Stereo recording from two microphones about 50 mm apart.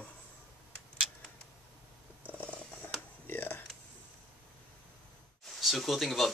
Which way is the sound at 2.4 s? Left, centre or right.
Left.